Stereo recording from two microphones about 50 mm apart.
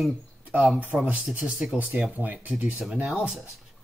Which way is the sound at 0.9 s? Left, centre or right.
Centre.